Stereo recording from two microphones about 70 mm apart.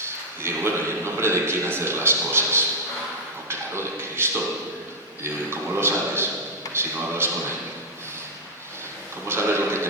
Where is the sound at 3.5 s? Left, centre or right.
Right.